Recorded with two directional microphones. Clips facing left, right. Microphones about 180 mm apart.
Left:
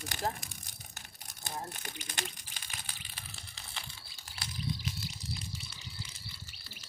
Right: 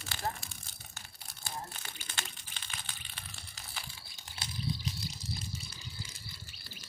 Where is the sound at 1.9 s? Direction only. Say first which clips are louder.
Left 3 dB; 15° left (ahead or behind).